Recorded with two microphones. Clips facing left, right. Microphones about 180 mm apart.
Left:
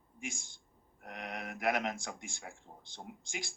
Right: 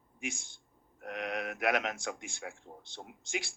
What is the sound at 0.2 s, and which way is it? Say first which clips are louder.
Speech: right 3 dB; 70° right (ahead or behind).